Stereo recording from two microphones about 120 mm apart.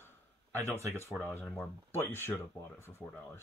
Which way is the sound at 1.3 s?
10° left (ahead or behind).